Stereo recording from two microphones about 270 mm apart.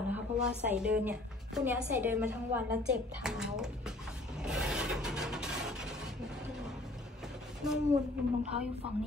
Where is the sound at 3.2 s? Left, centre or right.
Centre.